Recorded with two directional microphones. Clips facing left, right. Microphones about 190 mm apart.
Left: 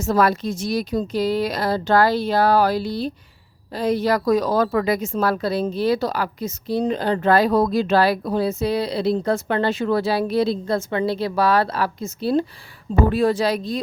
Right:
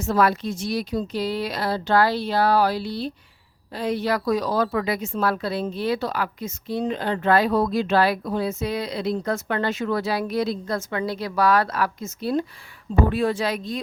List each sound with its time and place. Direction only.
0.0 s a woman's voice: 40° left (ahead or behind)